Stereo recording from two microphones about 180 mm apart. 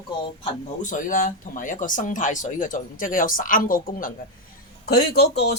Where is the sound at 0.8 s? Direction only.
45° left (ahead or behind).